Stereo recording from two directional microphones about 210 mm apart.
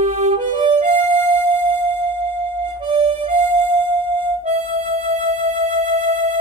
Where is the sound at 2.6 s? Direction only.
25° right (ahead or behind).